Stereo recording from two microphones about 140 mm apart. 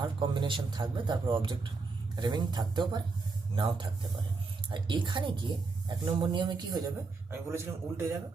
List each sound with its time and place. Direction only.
0.0 s speech: 35° right (ahead or behind)
7.3 s a man's voice: 20° right (ahead or behind)